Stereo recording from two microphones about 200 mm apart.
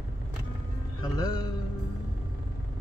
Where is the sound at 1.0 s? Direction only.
20° left (ahead or behind).